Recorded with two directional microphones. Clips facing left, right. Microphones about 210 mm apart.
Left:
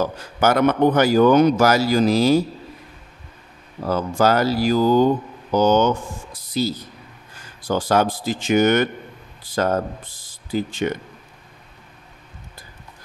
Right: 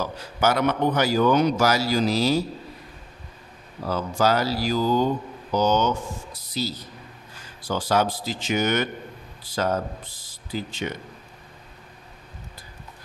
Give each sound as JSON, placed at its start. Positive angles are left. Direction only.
{"t": 0.0, "sound": "speech", "side_deg": 50}
{"t": 3.8, "sound": "speech", "side_deg": 50}